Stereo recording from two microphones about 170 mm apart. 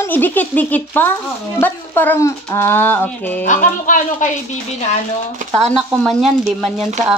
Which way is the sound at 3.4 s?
45° left (ahead or behind).